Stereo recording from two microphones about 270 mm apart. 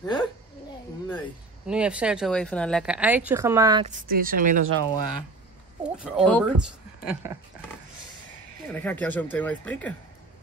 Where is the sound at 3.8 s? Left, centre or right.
Right.